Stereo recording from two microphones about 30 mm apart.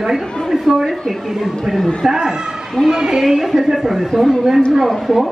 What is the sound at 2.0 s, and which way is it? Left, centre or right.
A woman's voice, right.